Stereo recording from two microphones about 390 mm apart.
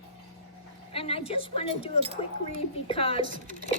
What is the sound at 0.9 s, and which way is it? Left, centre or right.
A woman's voice, centre.